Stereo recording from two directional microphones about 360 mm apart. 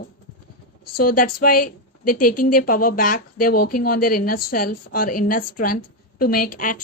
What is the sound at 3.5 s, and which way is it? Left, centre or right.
Speech, left.